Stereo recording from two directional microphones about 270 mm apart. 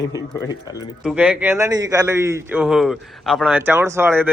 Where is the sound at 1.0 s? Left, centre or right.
Centre.